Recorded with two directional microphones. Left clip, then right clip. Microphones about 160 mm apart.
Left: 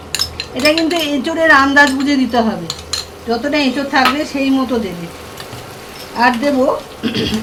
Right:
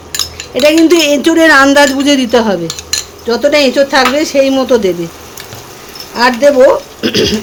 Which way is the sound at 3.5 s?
90° right.